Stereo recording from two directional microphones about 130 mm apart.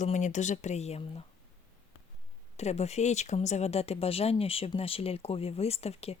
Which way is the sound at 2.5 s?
55° left (ahead or behind).